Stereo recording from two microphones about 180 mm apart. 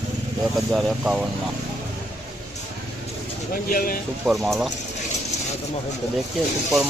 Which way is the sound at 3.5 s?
50° left (ahead or behind).